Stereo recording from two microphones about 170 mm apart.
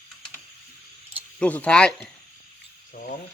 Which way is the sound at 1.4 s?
10° left (ahead or behind).